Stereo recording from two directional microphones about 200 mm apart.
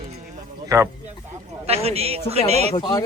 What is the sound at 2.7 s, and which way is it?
Speech, 20° left (ahead or behind).